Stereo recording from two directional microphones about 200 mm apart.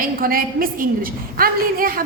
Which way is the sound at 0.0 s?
45° right (ahead or behind).